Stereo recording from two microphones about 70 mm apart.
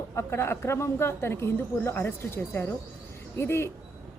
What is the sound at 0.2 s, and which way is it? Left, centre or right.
Speech, left.